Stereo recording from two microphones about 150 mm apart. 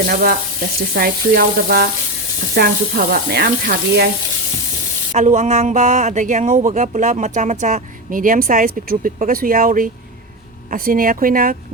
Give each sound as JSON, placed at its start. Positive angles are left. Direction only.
{"t": 0.1, "sound": "speech", "side_deg": -85}
{"t": 5.1, "sound": "speech", "side_deg": -55}